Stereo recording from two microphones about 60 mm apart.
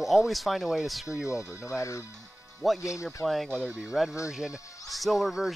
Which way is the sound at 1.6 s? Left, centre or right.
Left.